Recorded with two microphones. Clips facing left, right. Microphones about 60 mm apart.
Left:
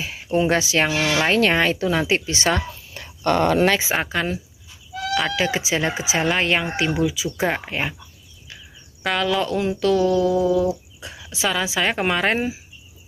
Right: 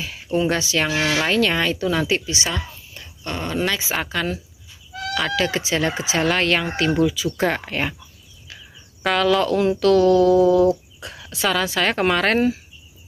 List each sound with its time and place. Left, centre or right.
0.0 s speech: left
2.5 s a sound: left
3.6 s speech: left
5.1 s speech: centre
9.0 s speech: centre